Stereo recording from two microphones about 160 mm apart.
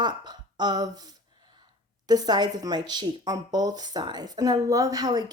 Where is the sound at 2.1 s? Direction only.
25° right (ahead or behind).